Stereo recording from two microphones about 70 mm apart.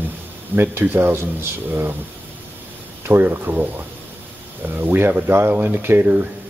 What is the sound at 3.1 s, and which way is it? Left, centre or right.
Speech, right.